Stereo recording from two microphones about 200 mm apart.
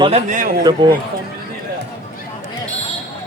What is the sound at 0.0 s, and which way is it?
Speech, 35° right (ahead or behind).